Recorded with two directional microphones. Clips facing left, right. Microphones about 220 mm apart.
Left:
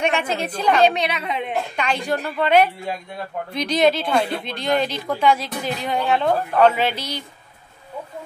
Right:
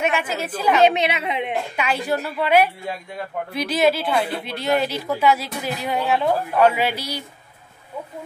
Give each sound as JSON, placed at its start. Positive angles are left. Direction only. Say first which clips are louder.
{"t": 0.0, "sound": "a woman's voice", "louder": "left 1 dB", "side_deg": -5}
{"t": 0.8, "sound": "a woman's voice", "louder": "right 1 dB", "side_deg": -25}
{"t": 1.8, "sound": "a woman's voice", "louder": "right 1 dB", "side_deg": -5}